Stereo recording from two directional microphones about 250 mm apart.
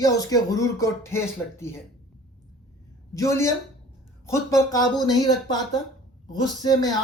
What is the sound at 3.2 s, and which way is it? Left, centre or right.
Speech, centre.